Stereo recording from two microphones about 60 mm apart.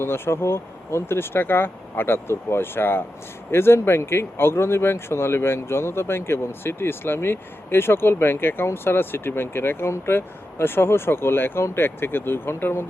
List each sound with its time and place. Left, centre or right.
0.0 s speech: left